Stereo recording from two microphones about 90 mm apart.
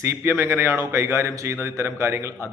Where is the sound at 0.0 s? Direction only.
30° right (ahead or behind).